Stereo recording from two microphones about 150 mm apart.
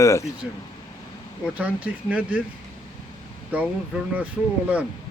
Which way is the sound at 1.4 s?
10° right (ahead or behind).